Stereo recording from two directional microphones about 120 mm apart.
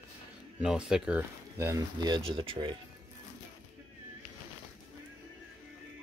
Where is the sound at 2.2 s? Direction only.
50° right (ahead or behind).